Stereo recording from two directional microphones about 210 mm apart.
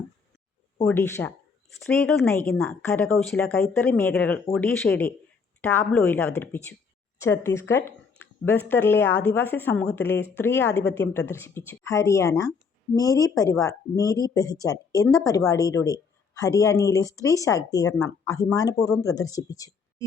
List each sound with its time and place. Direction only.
0.9 s a woman's voice: 10° left (ahead or behind)